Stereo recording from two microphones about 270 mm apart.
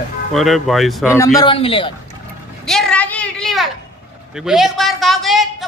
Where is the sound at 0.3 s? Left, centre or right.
Centre.